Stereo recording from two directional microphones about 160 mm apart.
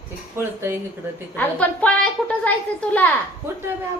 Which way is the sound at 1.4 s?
10° left (ahead or behind).